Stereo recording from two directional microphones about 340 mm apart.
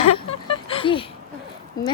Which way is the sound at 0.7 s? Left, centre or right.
Centre.